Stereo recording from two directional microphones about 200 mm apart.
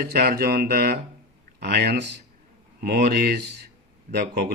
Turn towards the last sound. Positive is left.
turn(degrees=-55)  # may be behind; listen again after turning